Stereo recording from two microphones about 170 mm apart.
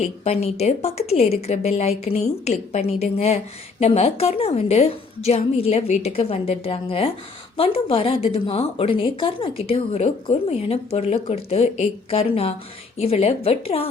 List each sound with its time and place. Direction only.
0.0 s a woman's voice: 40° left (ahead or behind)